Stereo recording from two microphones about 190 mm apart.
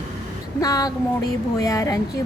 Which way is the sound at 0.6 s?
20° left (ahead or behind).